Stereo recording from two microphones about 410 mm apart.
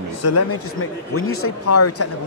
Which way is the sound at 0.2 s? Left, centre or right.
Left.